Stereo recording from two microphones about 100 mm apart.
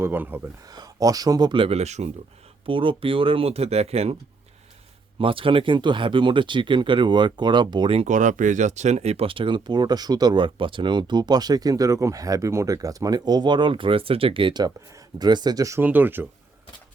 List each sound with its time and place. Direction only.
0.0 s speech: 20° right (ahead or behind)
0.7 s speech: 40° right (ahead or behind); by 2.0 s 90° right
2.6 s speech: 60° right (ahead or behind); by 4.2 s 90° right
5.2 s speech: 60° right (ahead or behind)
9.0 s speech: 85° right; by 14.6 s 60° right (ahead or behind)
14.6 s speech: 40° right (ahead or behind)
15.8 s speech: 20° right (ahead or behind)